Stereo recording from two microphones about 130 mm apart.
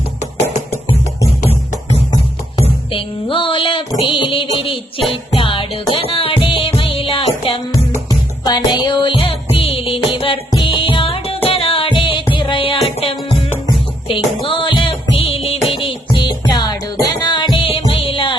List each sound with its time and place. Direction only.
2.9 s a sound: 40° left (ahead or behind)
4.4 s music: 45° left (ahead or behind)
8.4 s music: 35° left (ahead or behind)